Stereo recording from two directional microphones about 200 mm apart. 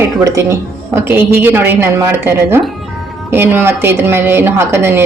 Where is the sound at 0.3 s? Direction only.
15° right (ahead or behind).